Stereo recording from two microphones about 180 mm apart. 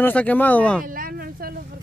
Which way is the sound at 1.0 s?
55° right (ahead or behind).